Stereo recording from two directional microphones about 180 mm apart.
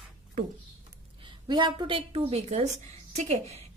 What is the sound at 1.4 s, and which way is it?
A woman's voice, 25° right (ahead or behind).